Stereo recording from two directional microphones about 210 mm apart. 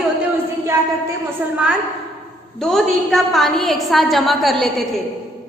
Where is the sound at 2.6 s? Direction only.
Centre (ahead or behind).